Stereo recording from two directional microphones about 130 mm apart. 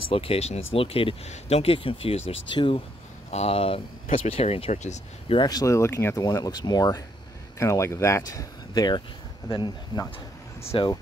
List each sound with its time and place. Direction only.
0.1 s speech: 45° left (ahead or behind)
3.3 s speech: 50° left (ahead or behind)
5.4 s speech: 30° left (ahead or behind)